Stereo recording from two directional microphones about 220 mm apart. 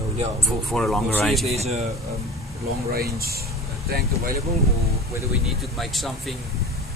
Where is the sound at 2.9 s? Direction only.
45° right (ahead or behind).